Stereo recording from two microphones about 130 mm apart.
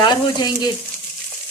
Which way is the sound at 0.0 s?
35° left (ahead or behind).